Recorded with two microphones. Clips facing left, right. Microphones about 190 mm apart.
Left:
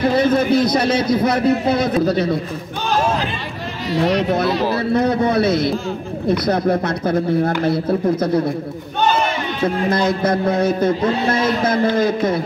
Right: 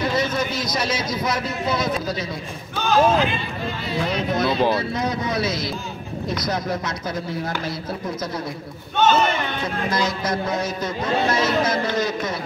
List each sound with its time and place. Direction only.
0.0 s a man's voice: 55° left (ahead or behind)
4.0 s a man's voice: 65° left (ahead or behind)
9.8 s a man's voice: 55° left (ahead or behind)